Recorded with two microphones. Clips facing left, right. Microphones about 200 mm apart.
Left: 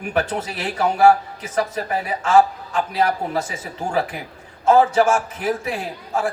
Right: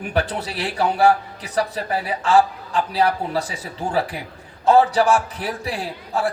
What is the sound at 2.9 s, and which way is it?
A man's voice, 35° right (ahead or behind).